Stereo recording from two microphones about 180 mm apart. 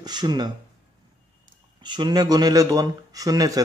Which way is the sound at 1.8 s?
25° right (ahead or behind).